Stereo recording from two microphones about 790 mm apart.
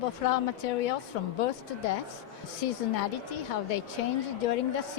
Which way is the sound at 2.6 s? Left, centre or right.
Left.